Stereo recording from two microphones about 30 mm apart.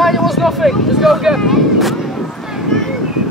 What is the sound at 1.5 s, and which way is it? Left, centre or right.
Speech, centre.